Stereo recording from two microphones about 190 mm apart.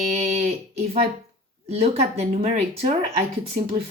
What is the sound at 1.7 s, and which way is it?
A woman's voice, 35° right (ahead or behind).